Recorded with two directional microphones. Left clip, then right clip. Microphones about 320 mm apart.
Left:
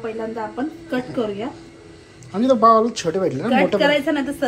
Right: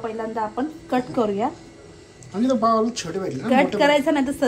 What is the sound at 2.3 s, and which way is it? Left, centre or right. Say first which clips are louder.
Speech: left 6 dB; centre.